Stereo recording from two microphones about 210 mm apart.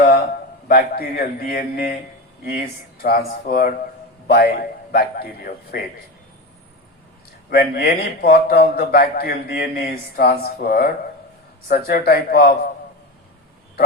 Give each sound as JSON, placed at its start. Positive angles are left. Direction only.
{"t": 0.0, "sound": "a man's voice", "side_deg": 45}
{"t": 7.5, "sound": "a man's voice", "side_deg": 45}